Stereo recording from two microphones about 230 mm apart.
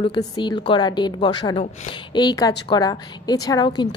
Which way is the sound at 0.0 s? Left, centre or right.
Centre.